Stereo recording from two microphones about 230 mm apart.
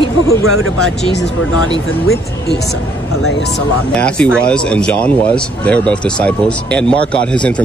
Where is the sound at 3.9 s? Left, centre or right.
Centre.